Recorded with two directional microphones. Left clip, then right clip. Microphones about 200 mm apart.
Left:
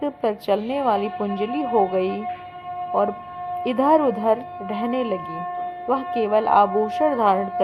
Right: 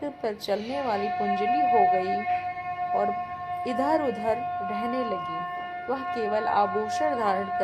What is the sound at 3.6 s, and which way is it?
Speech, 20° left (ahead or behind).